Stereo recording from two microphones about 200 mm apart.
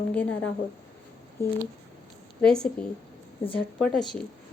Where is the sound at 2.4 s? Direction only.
5° left (ahead or behind).